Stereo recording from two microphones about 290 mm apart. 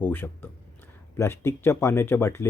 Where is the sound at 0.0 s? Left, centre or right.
Centre.